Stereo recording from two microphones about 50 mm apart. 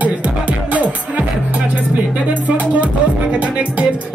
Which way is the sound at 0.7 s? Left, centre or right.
Right.